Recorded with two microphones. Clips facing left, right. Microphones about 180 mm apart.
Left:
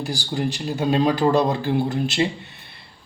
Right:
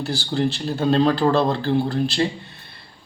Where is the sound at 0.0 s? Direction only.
15° left (ahead or behind).